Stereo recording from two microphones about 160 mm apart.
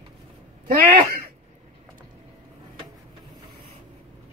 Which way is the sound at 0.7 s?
65° right (ahead or behind).